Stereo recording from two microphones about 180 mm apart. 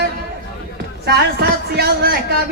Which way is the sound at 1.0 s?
65° right (ahead or behind).